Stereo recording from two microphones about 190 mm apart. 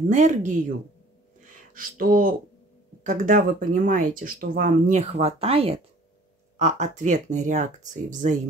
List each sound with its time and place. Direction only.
0.1 s speech: 40° right (ahead or behind)
1.4 s a sound: 45° right (ahead or behind)
3.0 s speech: 45° right (ahead or behind)